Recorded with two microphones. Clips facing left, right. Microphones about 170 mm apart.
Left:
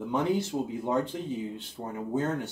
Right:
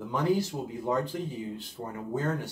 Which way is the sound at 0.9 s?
25° left (ahead or behind).